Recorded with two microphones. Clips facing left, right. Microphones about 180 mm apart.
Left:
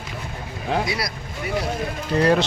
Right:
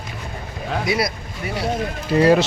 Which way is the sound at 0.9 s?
25° right (ahead or behind).